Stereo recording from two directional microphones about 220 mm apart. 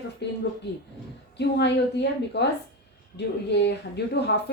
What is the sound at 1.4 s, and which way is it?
A woman's voice, 50° left (ahead or behind).